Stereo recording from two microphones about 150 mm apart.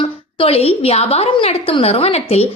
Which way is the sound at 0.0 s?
40° left (ahead or behind).